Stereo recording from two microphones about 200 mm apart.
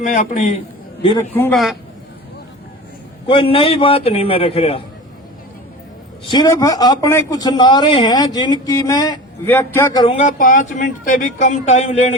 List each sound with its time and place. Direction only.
0.0 s a man's voice: 40° left (ahead or behind)
1.3 s a man's voice: 10° left (ahead or behind)
3.2 s a man's voice: 25° left (ahead or behind)
6.3 s a man's voice: 20° left (ahead or behind); by 11.8 s 35° left (ahead or behind)